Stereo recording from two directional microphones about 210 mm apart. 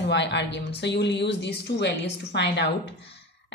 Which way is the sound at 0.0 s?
55° left (ahead or behind).